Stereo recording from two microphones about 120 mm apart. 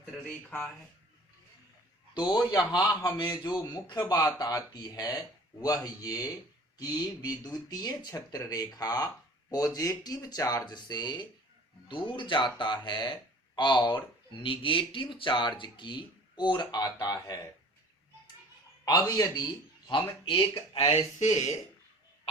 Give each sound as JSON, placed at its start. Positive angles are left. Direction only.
{"t": 0.3, "sound": "speech", "side_deg": 10}
{"t": 2.1, "sound": "speech", "side_deg": 40}
{"t": 18.9, "sound": "speech", "side_deg": 30}
{"t": 19.9, "sound": "speech", "side_deg": 45}
{"t": 21.2, "sound": "speech", "side_deg": 80}